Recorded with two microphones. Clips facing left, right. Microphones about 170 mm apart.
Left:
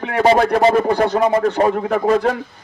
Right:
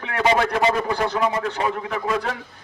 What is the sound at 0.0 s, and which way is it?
A man's voice, 40° left (ahead or behind).